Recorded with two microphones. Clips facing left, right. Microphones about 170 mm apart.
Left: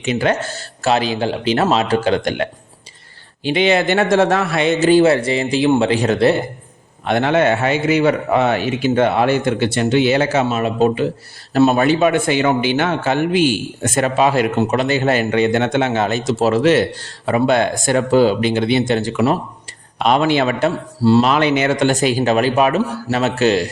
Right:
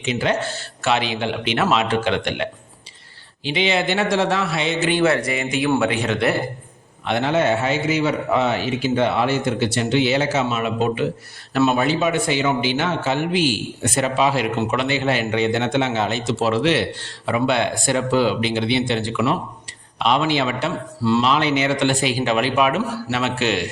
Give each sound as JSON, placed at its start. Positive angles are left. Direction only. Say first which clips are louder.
{"t": 0.0, "sound": "speech", "louder": "left 3 dB", "side_deg": 55}
{"t": 3.4, "sound": "a man's voice", "louder": "left 5 dB", "side_deg": 50}
{"t": 4.9, "sound": "speech", "louder": "left 7 dB", "side_deg": 30}
{"t": 7.0, "sound": "a man's voice", "louder": "left 4 dB", "side_deg": 55}
{"t": 10.6, "sound": "speech", "louder": "left 5 dB", "side_deg": 35}
{"t": 11.8, "sound": "a man's voice", "louder": "left 5 dB", "side_deg": 60}
{"t": 21.0, "sound": "speech", "louder": "left 6 dB", "side_deg": 35}
{"t": 21.2, "sound": "a man's voice", "louder": "left 3 dB", "side_deg": 55}